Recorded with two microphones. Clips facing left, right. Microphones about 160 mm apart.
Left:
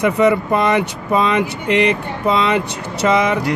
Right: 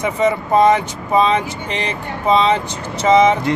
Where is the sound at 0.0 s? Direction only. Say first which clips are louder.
Left 3 dB; 65° left (ahead or behind).